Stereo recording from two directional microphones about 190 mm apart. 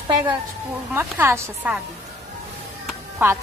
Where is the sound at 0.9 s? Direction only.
10° right (ahead or behind).